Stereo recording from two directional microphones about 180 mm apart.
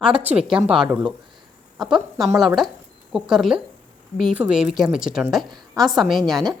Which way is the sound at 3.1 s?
5° right (ahead or behind).